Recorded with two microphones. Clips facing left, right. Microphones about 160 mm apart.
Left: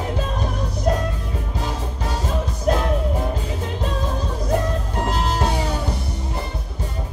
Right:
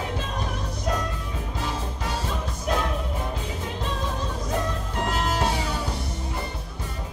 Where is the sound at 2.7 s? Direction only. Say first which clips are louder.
Left 6 dB; 45° left (ahead or behind).